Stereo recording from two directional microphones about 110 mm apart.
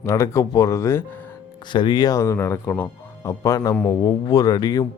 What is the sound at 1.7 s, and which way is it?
Speech, 45° left (ahead or behind).